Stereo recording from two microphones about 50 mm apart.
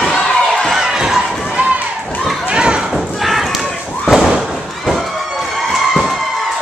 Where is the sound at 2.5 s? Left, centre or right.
Centre.